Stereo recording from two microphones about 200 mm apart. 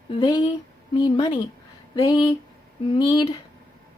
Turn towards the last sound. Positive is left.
turn(degrees=20)  # may be behind; listen again after turning